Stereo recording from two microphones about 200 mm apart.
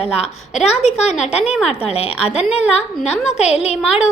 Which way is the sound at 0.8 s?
35° left (ahead or behind).